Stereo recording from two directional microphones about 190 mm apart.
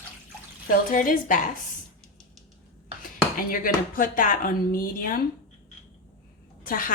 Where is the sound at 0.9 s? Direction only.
45° left (ahead or behind).